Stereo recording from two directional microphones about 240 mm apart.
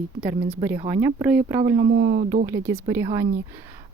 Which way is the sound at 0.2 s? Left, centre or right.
Centre.